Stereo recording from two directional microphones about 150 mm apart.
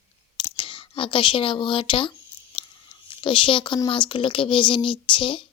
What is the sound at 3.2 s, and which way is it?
Speech, 35° left (ahead or behind).